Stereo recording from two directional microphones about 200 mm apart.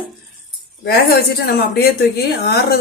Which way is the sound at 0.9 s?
50° left (ahead or behind).